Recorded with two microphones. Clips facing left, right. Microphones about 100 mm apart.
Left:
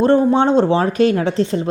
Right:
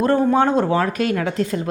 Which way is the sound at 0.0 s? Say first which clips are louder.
Left 3 dB; 25° left (ahead or behind).